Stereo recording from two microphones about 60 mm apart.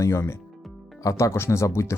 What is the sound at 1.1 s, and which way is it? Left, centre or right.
Speech, left.